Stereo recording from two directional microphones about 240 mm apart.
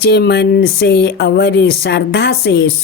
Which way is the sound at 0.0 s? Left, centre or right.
Left.